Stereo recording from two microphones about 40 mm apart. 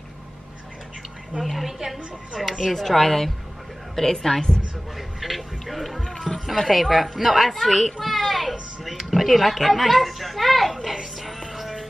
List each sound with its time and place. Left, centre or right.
1.4 s a woman's voice: centre
2.7 s a woman's voice: centre
4.9 s speech: centre
11.1 s music: centre